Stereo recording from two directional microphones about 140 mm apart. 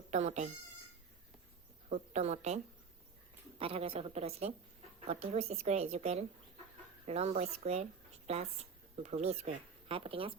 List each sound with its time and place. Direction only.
0.1 s a woman's voice: 55° right (ahead or behind)
1.9 s a woman's voice: 55° right (ahead or behind)
3.6 s speech: 45° right (ahead or behind)